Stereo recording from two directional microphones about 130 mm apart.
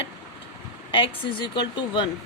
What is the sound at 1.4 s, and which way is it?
Speech, 35° left (ahead or behind).